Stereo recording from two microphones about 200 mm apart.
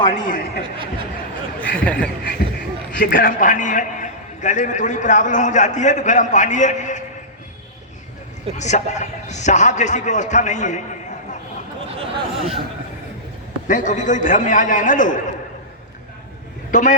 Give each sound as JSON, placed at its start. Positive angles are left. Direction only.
{"t": 0.0, "sound": "a man's voice", "side_deg": 40}
{"t": 1.7, "sound": "speech", "side_deg": 5}
{"t": 3.0, "sound": "a man's voice", "side_deg": 45}
{"t": 8.5, "sound": "a man's voice", "side_deg": 35}
{"t": 11.9, "sound": "speech", "side_deg": -30}
{"t": 13.7, "sound": "a man's voice", "side_deg": 40}
{"t": 16.7, "sound": "a man's voice", "side_deg": 40}